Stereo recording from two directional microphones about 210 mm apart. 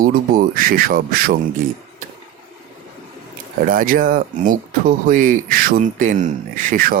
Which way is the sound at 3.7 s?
40° right (ahead or behind).